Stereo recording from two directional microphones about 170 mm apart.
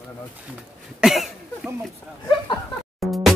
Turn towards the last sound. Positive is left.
turn(degrees=0)  # may be behind; listen again after turning